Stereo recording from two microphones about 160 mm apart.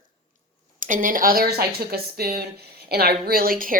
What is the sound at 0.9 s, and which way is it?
A woman's voice, 55° right (ahead or behind).